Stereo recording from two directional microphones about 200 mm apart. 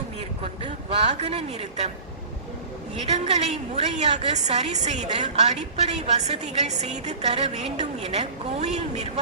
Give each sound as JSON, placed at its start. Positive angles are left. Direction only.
{"t": 0.9, "sound": "a woman's voice", "side_deg": -30}
{"t": 3.1, "sound": "a woman's voice", "side_deg": -30}